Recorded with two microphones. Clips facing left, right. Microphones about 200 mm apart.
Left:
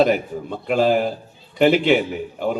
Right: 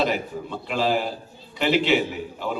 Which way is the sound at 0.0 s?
50° left (ahead or behind).